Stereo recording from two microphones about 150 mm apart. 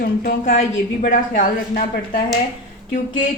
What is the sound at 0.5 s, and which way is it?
A woman's voice, 60° left (ahead or behind).